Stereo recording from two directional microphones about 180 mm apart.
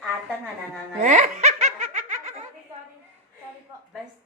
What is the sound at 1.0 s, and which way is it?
Laughter, 40° right (ahead or behind).